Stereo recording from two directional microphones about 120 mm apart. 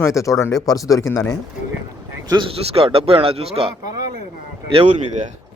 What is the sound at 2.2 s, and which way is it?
A man's voice, 45° right (ahead or behind).